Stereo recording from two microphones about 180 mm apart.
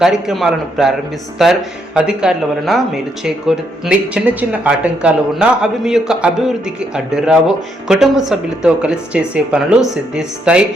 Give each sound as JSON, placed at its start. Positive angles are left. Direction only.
{"t": 0.0, "sound": "speech", "side_deg": 0}
{"t": 2.0, "sound": "speech", "side_deg": -5}